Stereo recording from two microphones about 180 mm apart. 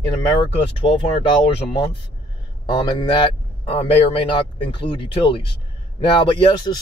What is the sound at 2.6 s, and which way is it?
Speech, 25° left (ahead or behind).